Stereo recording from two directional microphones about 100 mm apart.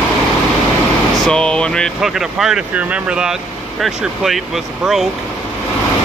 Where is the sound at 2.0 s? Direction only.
5° right (ahead or behind).